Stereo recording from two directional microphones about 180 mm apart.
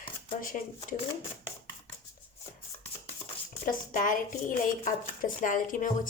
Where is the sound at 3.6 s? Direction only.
45° left (ahead or behind).